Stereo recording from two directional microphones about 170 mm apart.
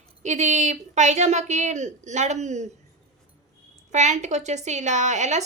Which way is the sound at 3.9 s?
45° right (ahead or behind).